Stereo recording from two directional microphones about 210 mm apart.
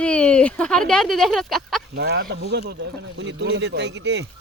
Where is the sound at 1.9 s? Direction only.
50° right (ahead or behind).